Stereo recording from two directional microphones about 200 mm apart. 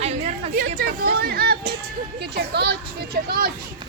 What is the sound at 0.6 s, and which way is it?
Speech, 50° right (ahead or behind).